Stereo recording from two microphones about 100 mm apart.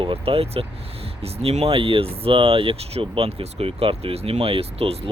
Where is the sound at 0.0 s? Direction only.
70° right (ahead or behind).